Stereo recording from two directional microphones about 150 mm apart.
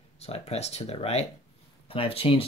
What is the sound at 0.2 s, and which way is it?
Speech, 45° left (ahead or behind).